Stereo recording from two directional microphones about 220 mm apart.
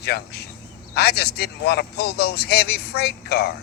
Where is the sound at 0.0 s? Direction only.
45° left (ahead or behind).